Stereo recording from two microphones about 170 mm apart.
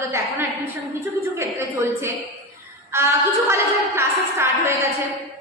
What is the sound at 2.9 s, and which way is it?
A woman's voice, 15° right (ahead or behind).